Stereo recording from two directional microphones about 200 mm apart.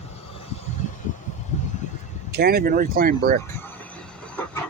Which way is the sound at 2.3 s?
50° right (ahead or behind).